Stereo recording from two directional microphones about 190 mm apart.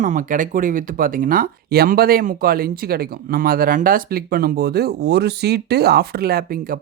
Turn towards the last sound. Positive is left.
turn(degrees=-50)  # may be behind; listen again after turning